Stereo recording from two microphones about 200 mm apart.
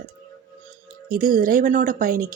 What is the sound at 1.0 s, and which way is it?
Speech, 45° right (ahead or behind).